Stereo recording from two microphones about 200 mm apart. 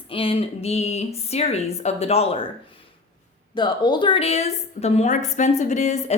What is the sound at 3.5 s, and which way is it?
A woman's voice, 20° left (ahead or behind).